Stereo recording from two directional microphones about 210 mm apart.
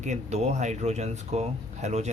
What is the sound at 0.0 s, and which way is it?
Speech, 35° right (ahead or behind).